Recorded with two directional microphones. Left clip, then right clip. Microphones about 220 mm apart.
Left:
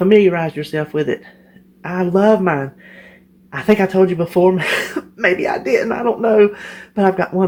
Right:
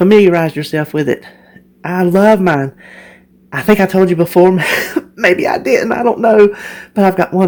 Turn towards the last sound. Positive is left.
turn(degrees=-45)  # may be behind; listen again after turning